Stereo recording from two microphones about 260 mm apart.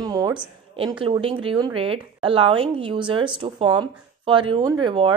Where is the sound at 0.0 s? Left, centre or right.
Centre.